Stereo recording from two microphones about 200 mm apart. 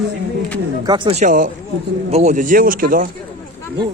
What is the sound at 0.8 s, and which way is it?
Speech, 25° right (ahead or behind).